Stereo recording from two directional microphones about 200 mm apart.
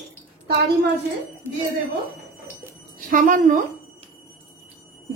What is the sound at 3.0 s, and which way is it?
Speech, 40° right (ahead or behind).